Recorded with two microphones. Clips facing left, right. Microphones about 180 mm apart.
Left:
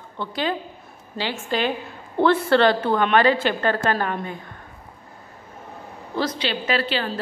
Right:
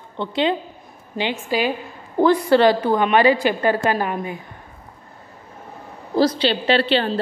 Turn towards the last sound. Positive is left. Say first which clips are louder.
# right 6 dB
turn(degrees=-30)  # may be behind; listen again after turning